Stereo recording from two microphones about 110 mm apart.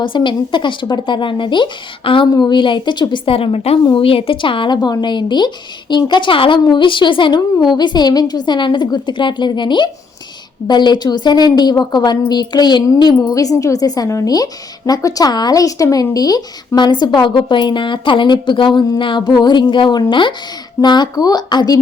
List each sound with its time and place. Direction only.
0.0 s speech: 50° left (ahead or behind)